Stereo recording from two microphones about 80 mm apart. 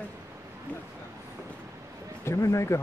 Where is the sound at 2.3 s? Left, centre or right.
Left.